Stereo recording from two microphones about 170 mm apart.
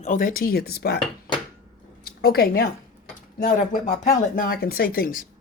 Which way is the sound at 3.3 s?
50° left (ahead or behind).